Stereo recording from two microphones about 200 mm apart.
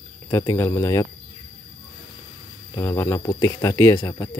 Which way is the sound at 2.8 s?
15° left (ahead or behind).